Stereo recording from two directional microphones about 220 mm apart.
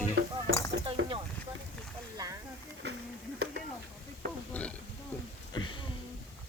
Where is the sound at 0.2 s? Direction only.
45° right (ahead or behind).